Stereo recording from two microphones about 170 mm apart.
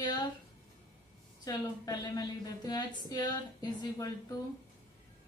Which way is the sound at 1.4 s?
20° left (ahead or behind).